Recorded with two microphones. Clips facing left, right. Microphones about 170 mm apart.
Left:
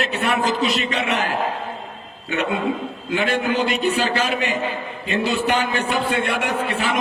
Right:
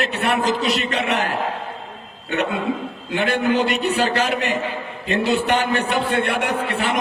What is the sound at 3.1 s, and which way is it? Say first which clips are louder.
A man's voice: right 2 dB; 65° right (ahead or behind).